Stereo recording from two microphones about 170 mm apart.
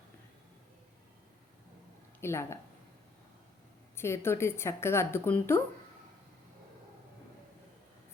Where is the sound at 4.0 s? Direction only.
15° left (ahead or behind).